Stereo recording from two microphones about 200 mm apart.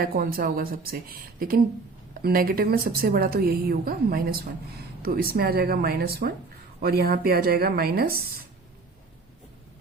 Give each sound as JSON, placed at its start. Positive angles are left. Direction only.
{"t": 0.0, "sound": "a woman's voice", "side_deg": -50}